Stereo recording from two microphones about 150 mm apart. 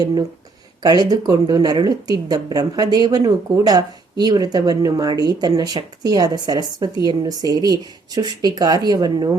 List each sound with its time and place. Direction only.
0.8 s speech: 25° right (ahead or behind)